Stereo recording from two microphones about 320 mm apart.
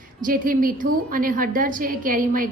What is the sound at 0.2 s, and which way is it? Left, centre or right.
A woman's voice, right.